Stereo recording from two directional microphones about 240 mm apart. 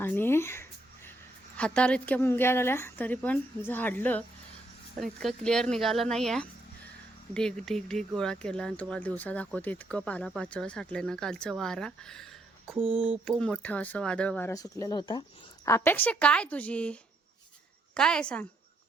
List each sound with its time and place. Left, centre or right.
0.0 s a sound: centre
1.5 s a woman's voice: centre
12.8 s speech: right
13.2 s a woman's voice: centre